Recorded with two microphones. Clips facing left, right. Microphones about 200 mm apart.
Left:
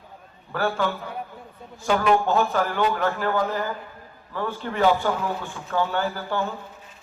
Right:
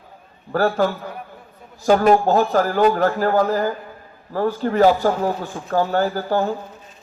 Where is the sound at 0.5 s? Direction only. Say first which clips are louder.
Right 6 dB; 40° right (ahead or behind).